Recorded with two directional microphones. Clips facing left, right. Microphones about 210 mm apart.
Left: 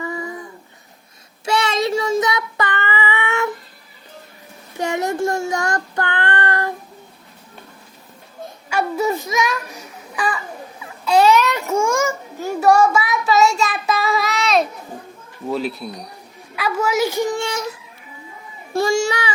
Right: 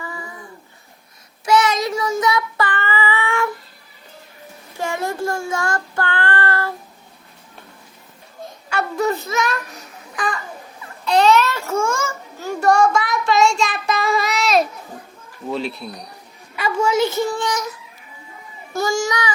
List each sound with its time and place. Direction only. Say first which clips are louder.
0.0 s child singing: left 6 dB; 20° left (ahead or behind)
1.5 s child singing: right 2 dB; 25° left (ahead or behind)
4.8 s child singing: left 3 dB; 20° left (ahead or behind)
8.7 s a child's voice: left 1 dB; 10° left (ahead or behind)
11.0 s a sound: left 1 dB; 5° left (ahead or behind)
12.5 s child singing: left 1 dB; 5° left (ahead or behind)
15.4 s a woman's voice: left 2 dB; centre (ahead or behind); by 17.7 s 25° left (ahead or behind)
18.7 s a child's voice: left 3 dB; 25° left (ahead or behind)